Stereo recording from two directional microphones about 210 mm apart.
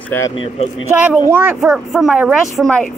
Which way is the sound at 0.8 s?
10° right (ahead or behind).